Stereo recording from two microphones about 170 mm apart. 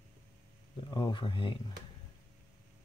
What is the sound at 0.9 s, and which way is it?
Speech, 25° left (ahead or behind).